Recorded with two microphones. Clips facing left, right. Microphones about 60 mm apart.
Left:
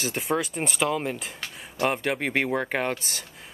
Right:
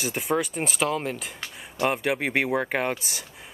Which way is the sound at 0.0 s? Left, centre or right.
Centre.